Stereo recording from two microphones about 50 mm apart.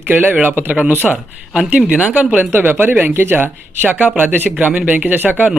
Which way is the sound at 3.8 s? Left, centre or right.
Right.